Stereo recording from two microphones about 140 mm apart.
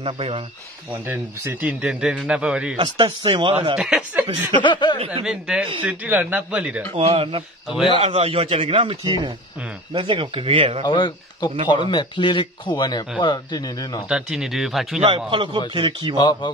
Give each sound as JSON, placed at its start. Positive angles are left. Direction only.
{"t": 0.0, "sound": "a man's voice", "side_deg": -40}
{"t": 1.0, "sound": "a man's voice", "side_deg": -15}
{"t": 2.8, "sound": "a man's voice", "side_deg": -35}
{"t": 3.7, "sound": "speech", "side_deg": -5}
{"t": 4.6, "sound": "a man's voice", "side_deg": 35}
{"t": 5.2, "sound": "a man's voice", "side_deg": -5}
{"t": 7.0, "sound": "a man's voice", "side_deg": -40}
{"t": 10.8, "sound": "a man's voice", "side_deg": 35}
{"t": 14.0, "sound": "speech", "side_deg": -5}
{"t": 15.0, "sound": "a man's voice", "side_deg": -35}
{"t": 16.2, "sound": "a man's voice", "side_deg": 30}